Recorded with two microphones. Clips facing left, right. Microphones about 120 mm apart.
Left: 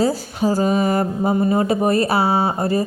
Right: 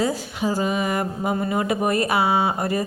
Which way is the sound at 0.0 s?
40° left (ahead or behind).